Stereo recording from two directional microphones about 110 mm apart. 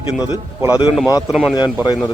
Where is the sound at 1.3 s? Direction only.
5° right (ahead or behind).